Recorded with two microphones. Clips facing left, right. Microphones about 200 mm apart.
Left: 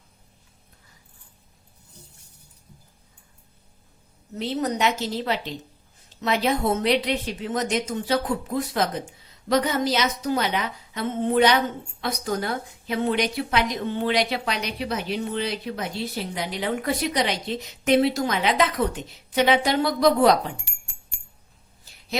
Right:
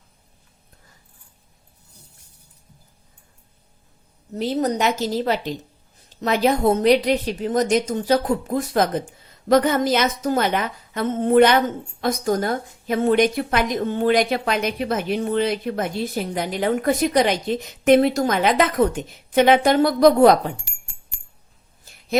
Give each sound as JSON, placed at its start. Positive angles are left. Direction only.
{"t": 4.4, "sound": "a woman's voice", "side_deg": -40}